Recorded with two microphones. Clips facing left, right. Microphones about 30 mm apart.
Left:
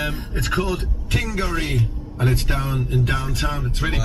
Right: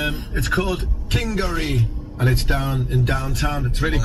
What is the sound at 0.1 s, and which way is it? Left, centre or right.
Speech, right.